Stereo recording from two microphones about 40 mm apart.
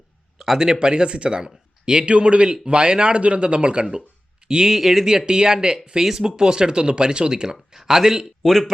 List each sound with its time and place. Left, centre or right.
0.3 s a sound: centre
0.6 s speech: centre
4.4 s speech: centre
4.7 s speech: centre
5.0 s speech: centre
7.5 s speech: centre
8.4 s a man's voice: centre